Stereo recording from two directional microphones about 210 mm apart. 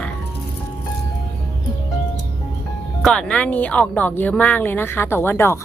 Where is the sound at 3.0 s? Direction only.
5° left (ahead or behind).